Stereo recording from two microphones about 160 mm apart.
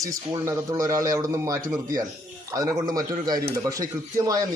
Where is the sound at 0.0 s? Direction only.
20° right (ahead or behind).